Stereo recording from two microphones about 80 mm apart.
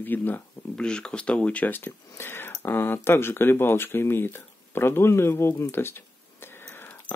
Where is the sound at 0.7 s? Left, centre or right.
Centre.